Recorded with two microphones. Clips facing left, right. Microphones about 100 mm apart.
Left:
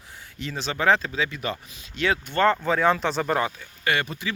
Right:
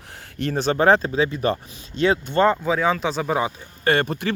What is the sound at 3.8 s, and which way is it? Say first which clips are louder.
Speech: right 6 dB; 45° right (ahead or behind).